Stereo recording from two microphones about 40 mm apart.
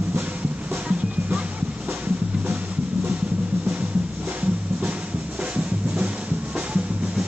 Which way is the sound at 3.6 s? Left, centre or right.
Right.